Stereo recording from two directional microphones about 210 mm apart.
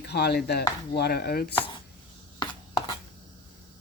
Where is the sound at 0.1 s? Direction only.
50° left (ahead or behind).